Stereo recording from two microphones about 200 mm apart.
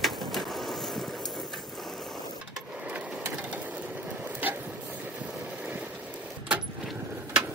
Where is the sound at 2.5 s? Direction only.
5° right (ahead or behind).